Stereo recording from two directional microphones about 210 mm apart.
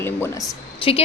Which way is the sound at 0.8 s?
25° left (ahead or behind).